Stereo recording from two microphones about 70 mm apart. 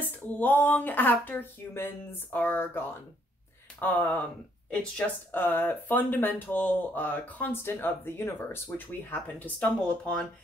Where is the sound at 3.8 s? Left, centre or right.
Left.